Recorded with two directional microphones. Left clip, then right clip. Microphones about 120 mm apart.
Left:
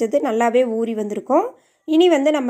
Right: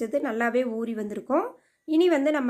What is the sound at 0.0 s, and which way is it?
Speech, 35° left (ahead or behind).